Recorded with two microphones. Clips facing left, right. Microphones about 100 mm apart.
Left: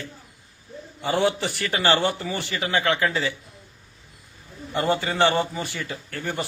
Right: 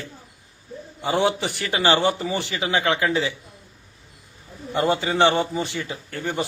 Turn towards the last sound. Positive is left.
turn(degrees=-15)  # may be behind; listen again after turning